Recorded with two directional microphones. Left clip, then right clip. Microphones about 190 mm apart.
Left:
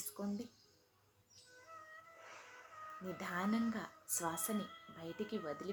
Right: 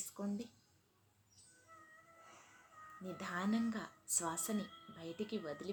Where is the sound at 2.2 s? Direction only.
30° left (ahead or behind).